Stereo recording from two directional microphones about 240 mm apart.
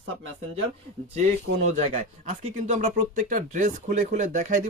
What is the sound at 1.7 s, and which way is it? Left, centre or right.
Speech, right.